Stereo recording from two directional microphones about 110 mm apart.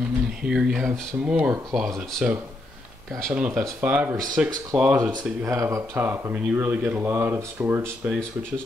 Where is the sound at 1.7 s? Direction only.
Centre (ahead or behind).